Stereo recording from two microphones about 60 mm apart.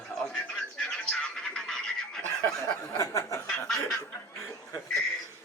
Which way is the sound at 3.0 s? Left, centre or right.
Left.